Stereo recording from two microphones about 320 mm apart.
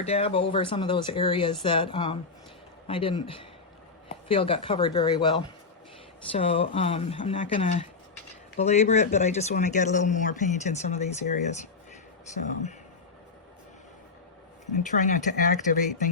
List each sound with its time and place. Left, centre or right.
0.0 s speech: centre
14.8 s speech: left